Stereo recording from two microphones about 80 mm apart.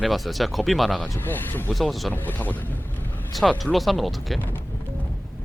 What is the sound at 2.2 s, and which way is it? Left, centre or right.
Speech, left.